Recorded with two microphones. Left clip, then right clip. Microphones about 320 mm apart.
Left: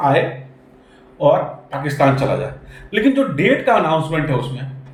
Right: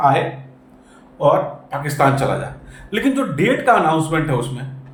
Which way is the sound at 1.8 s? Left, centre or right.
Centre.